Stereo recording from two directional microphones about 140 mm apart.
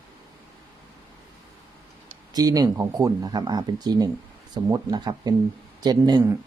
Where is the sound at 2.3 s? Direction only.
25° right (ahead or behind).